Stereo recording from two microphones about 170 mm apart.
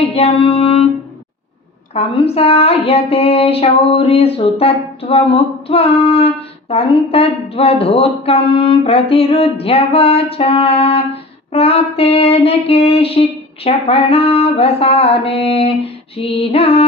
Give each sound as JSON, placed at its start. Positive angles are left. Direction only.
{"t": 0.0, "sound": "music", "side_deg": 35}
{"t": 1.9, "sound": "speech", "side_deg": 35}